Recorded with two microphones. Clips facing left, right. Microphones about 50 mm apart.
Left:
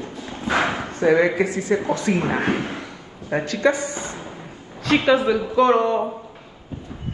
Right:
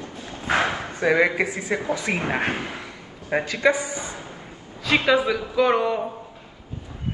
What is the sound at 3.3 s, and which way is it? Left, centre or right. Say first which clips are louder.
Speech: left 1 dB; right.